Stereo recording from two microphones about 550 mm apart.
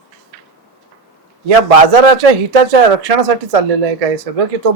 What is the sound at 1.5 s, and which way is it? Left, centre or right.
A man's voice, right.